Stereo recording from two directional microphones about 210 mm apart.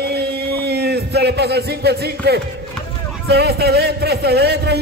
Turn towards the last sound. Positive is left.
turn(degrees=-50)  # may be behind; listen again after turning